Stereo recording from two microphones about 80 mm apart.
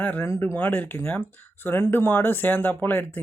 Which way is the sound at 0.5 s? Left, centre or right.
Left.